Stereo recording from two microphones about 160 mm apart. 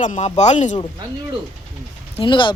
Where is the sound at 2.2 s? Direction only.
30° left (ahead or behind).